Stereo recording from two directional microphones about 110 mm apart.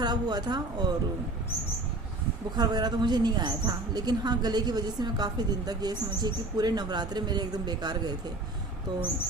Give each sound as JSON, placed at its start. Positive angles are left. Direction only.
{"t": 0.0, "sound": "a woman's voice", "side_deg": -40}
{"t": 2.6, "sound": "a woman's voice", "side_deg": -40}